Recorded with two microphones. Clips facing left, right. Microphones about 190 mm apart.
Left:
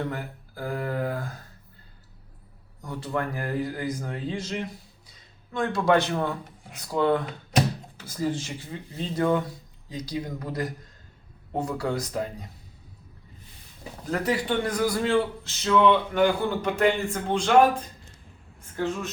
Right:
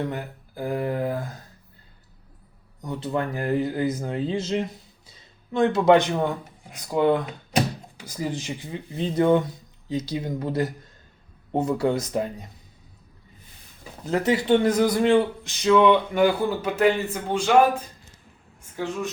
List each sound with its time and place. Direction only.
0.1 s a sound: 20° right (ahead or behind)
2.8 s speech: 20° right (ahead or behind)
14.0 s speech: 25° right (ahead or behind); by 17.5 s 5° right (ahead or behind)